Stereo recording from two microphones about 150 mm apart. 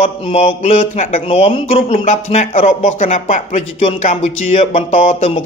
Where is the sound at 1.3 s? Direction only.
40° left (ahead or behind); by 4.3 s 55° left (ahead or behind).